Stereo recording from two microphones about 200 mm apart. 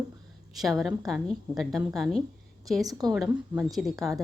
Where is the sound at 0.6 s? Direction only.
Centre (ahead or behind).